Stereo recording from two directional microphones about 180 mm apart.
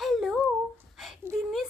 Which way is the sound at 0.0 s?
Centre (ahead or behind).